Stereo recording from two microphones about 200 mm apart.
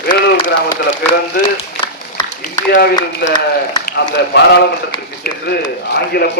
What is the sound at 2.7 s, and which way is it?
Speech, 50° left (ahead or behind).